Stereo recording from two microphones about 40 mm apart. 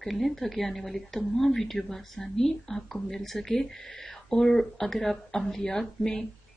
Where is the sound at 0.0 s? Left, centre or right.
Centre.